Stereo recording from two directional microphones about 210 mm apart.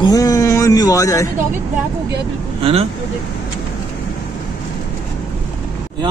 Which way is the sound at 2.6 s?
25° right (ahead or behind).